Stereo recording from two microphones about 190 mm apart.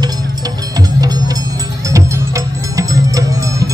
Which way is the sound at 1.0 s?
20° right (ahead or behind).